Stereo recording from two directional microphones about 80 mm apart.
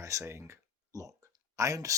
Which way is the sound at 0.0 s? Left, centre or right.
Right.